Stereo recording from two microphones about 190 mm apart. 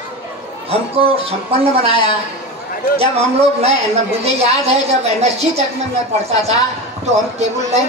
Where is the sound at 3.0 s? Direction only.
30° right (ahead or behind).